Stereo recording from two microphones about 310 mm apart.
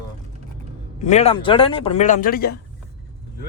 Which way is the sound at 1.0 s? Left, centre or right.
Left.